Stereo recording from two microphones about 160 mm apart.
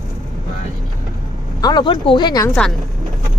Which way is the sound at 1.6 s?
30° left (ahead or behind).